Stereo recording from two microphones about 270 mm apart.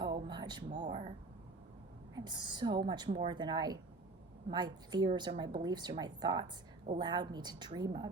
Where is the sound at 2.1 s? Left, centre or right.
Centre.